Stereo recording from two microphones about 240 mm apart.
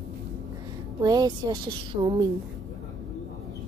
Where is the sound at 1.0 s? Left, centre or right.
Centre.